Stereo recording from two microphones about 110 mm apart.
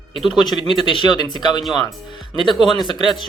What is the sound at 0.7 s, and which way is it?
Speech, 45° left (ahead or behind).